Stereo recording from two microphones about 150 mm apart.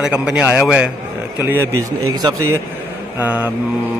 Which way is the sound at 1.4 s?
15° right (ahead or behind).